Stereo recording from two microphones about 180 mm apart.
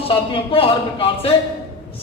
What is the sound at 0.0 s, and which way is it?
Speech, 30° left (ahead or behind).